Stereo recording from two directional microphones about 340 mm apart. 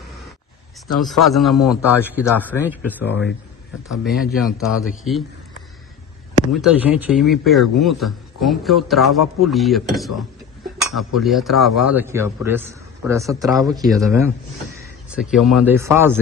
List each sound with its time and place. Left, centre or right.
0.9 s speech: centre
3.1 s speech: left
4.0 s speech: centre
6.5 s speech: centre